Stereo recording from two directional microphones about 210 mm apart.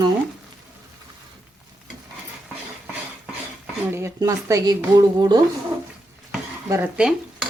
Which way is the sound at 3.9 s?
10° right (ahead or behind).